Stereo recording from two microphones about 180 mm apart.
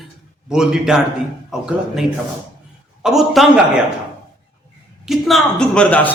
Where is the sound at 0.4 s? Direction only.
5° right (ahead or behind).